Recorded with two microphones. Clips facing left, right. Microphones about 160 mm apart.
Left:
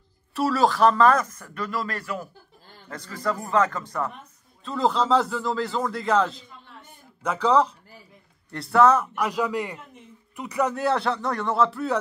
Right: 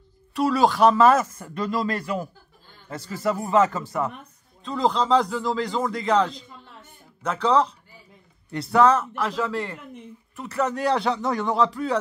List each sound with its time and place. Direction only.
0.3 s speech: centre (ahead or behind)
1.3 s speech: 20° right (ahead or behind)
3.3 s a man's voice: 15° right (ahead or behind); by 12.0 s 5° left (ahead or behind)